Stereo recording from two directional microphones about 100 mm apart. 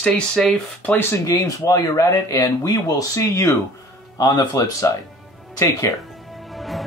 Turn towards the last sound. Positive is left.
turn(degrees=0)  # may be behind; listen again after turning